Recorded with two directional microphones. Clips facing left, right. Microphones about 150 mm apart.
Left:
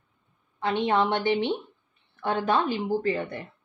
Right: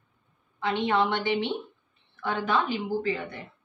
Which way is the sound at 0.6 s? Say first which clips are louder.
Left 1 dB; 45° left (ahead or behind).